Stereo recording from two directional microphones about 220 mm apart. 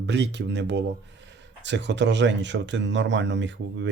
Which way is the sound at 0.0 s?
50° right (ahead or behind).